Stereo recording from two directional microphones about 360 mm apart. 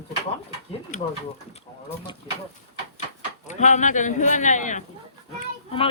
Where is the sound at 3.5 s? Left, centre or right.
Centre.